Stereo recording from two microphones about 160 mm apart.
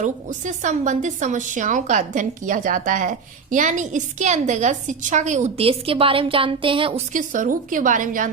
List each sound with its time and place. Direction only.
0.0 s a woman's voice: 50° right (ahead or behind); by 7.0 s 35° right (ahead or behind)
7.1 s a woman's voice: 55° right (ahead or behind)